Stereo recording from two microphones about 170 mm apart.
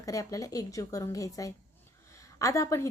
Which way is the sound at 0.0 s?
20° left (ahead or behind).